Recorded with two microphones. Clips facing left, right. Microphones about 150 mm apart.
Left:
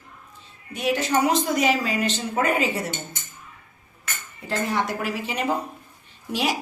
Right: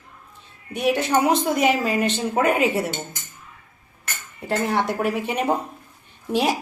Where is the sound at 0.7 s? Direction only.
60° right (ahead or behind).